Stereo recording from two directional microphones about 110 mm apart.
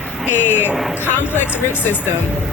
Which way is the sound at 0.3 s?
20° left (ahead or behind).